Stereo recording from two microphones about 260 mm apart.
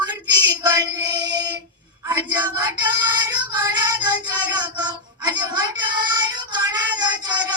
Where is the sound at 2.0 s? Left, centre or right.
Centre.